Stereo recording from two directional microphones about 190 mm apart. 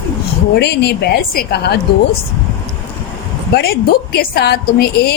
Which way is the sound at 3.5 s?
55° left (ahead or behind).